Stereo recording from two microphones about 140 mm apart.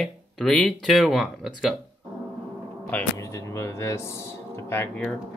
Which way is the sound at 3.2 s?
20° left (ahead or behind).